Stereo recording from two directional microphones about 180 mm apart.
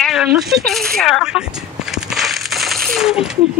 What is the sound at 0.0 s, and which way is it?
Speech, centre (ahead or behind).